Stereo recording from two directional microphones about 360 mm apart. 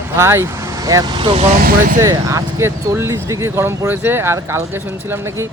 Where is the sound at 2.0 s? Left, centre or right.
Centre.